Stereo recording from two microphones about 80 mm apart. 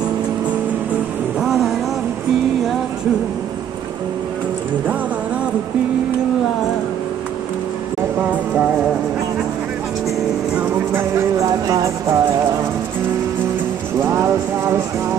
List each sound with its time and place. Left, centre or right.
1.4 s vehicle: centre
8.2 s music: centre
10.9 s music: right
11.3 s music: right
14.0 s clip-clop: right